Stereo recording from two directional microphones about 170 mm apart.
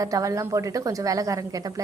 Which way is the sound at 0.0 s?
20° right (ahead or behind).